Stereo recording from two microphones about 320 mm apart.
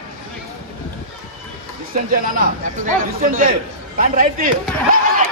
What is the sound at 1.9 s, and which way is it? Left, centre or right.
A man's voice, right.